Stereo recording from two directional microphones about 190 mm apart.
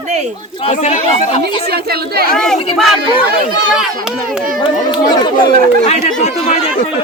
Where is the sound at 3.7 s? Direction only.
5° right (ahead or behind).